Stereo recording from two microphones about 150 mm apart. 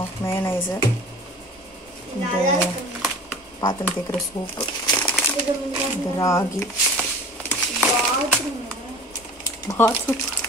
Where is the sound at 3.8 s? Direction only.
15° left (ahead or behind).